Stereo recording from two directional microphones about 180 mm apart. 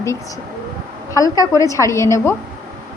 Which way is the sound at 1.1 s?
20° left (ahead or behind).